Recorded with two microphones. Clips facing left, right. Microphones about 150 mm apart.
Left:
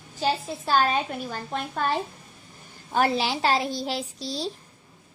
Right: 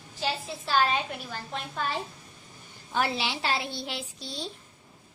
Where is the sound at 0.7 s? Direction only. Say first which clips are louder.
Left 3 dB; 45° left (ahead or behind).